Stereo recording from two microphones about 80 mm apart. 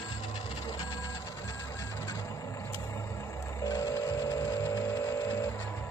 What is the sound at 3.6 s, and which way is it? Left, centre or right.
Vehicle, left.